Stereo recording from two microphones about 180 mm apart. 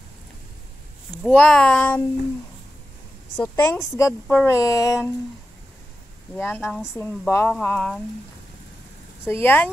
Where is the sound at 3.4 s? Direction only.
15° left (ahead or behind).